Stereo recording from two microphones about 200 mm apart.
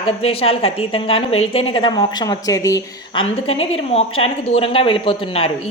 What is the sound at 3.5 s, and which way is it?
Speech, 30° left (ahead or behind).